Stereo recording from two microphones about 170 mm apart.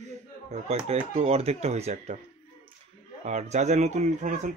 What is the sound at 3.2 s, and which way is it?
Speech, 45° right (ahead or behind).